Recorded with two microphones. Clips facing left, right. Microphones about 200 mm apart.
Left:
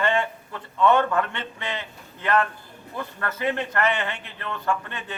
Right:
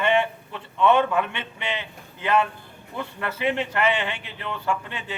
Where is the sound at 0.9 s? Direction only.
10° right (ahead or behind).